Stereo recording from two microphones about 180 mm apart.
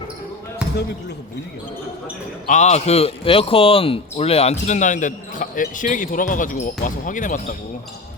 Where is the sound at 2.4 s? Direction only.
40° left (ahead or behind).